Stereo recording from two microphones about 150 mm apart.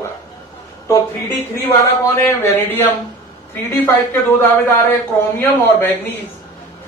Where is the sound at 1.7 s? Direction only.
15° left (ahead or behind).